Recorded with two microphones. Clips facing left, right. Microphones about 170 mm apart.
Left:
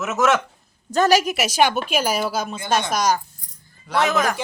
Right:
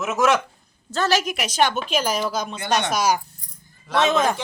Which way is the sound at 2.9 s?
5° right (ahead or behind).